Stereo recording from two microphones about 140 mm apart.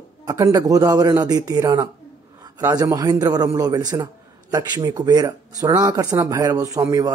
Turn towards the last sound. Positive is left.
turn(degrees=-25)  # may be behind; listen again after turning